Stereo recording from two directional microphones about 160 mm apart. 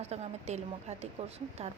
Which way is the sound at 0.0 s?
45° right (ahead or behind).